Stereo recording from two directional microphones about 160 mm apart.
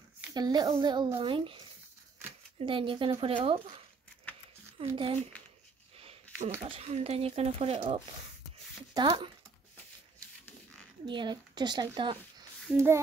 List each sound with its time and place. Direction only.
0.3 s speech: 25° right (ahead or behind)
2.6 s speech: 30° right (ahead or behind)
4.9 s speech: 35° right (ahead or behind)
5.9 s a sound: 35° right (ahead or behind)
6.6 s speech: 40° right (ahead or behind)
8.9 s speech: 30° right (ahead or behind)
11.1 s speech: 30° right (ahead or behind)
12.7 s a sound: 15° right (ahead or behind)